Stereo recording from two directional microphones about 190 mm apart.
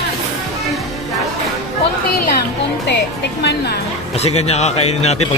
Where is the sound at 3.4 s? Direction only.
60° left (ahead or behind).